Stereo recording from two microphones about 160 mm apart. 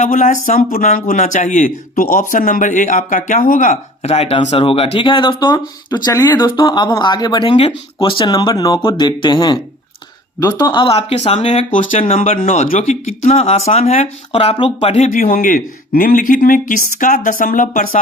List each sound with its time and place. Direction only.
0.0 s speech: 55° left (ahead or behind)
12.2 s speech: 50° left (ahead or behind)